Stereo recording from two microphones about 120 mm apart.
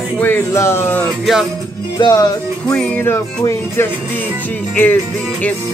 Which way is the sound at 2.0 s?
30° left (ahead or behind).